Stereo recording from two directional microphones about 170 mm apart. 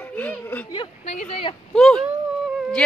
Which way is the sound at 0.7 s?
40° left (ahead or behind).